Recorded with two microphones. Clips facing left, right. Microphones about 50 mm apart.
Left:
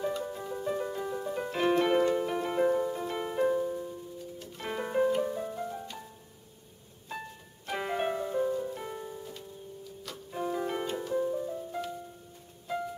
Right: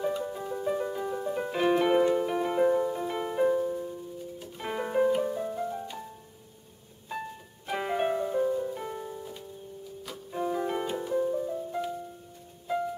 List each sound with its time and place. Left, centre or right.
0.0 s music: centre
7.1 s music: centre